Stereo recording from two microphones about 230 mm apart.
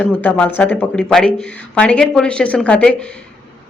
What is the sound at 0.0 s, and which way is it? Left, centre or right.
Speech, centre.